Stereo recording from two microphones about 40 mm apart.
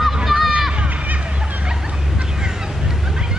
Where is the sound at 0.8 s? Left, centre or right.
Right.